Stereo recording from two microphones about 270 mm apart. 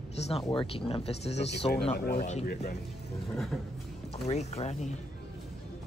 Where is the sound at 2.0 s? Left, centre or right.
Left.